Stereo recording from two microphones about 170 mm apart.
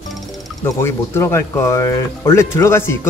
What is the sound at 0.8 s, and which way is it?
Speech, 15° left (ahead or behind).